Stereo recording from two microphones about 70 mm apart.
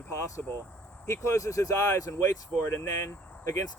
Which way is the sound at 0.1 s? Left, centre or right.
Left.